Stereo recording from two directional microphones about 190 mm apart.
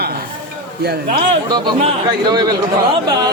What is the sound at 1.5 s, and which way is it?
Speech, 20° right (ahead or behind).